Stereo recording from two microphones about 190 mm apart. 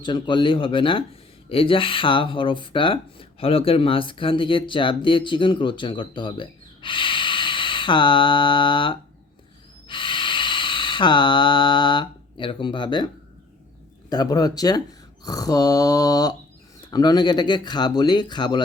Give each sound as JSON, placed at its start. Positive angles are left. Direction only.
{"t": 0.0, "sound": "speech", "side_deg": 25}
{"t": 9.9, "sound": "a sound", "side_deg": 25}
{"t": 14.1, "sound": "speech", "side_deg": 20}